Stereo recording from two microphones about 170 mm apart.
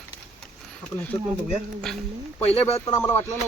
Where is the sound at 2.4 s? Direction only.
35° left (ahead or behind).